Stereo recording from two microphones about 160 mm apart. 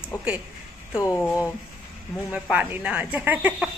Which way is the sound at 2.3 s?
10° right (ahead or behind).